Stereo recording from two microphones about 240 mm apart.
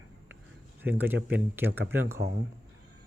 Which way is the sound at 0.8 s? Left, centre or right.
Centre.